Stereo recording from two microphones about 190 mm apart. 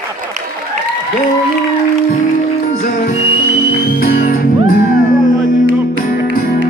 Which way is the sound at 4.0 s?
45° left (ahead or behind).